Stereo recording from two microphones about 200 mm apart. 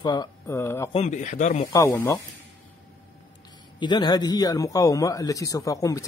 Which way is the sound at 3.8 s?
20° left (ahead or behind).